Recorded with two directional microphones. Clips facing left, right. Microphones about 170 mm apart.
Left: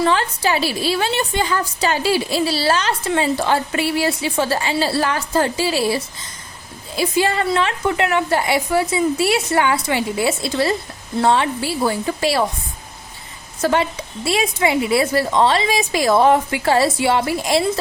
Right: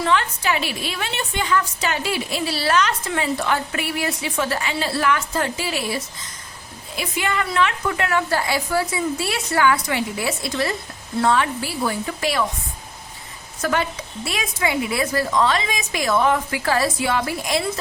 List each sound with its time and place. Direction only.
0.0 s a woman's voice: 35° left (ahead or behind)
13.6 s a woman's voice: 30° left (ahead or behind)